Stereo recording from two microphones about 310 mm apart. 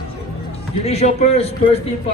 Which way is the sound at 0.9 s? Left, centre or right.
Centre.